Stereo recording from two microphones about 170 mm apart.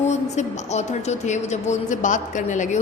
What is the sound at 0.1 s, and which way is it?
A woman's voice, 40° left (ahead or behind).